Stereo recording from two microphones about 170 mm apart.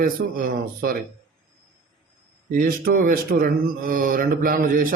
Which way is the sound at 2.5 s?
60° right (ahead or behind).